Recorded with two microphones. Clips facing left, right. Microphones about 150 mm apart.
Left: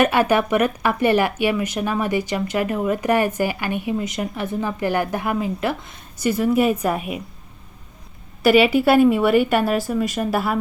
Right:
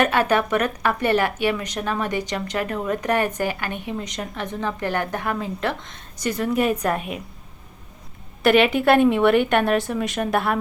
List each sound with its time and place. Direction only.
0.0 s speech: 10° left (ahead or behind)
8.4 s a woman's voice: 5° left (ahead or behind)